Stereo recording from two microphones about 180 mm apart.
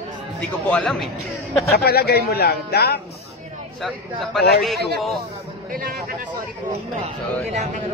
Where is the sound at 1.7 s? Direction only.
60° left (ahead or behind).